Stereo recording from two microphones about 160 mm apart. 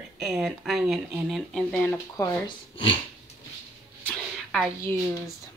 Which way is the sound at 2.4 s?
30° left (ahead or behind).